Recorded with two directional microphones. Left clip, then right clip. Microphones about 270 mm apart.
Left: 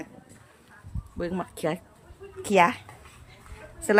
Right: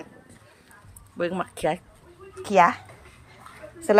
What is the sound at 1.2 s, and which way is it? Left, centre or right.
Speech, centre.